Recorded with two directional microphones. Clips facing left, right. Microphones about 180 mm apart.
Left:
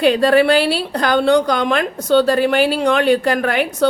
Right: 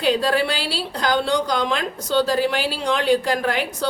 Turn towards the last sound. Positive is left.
turn(degrees=60)  # may be behind; listen again after turning